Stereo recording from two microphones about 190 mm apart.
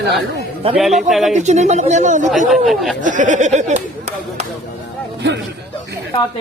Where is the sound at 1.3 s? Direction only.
35° right (ahead or behind).